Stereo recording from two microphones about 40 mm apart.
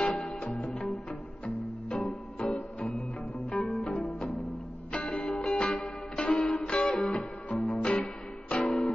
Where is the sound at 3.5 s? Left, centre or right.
Centre.